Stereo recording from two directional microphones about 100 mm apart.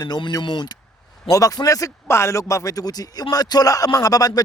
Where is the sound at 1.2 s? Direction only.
35° left (ahead or behind).